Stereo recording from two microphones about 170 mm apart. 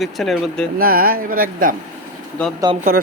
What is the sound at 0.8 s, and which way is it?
Speech, 55° right (ahead or behind).